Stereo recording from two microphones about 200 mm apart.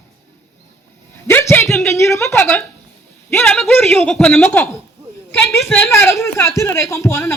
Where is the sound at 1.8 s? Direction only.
15° left (ahead or behind).